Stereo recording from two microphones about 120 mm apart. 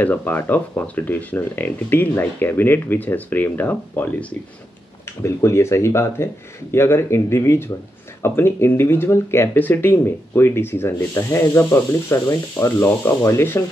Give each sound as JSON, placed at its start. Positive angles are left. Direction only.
{"t": 0.0, "sound": "speech", "side_deg": 15}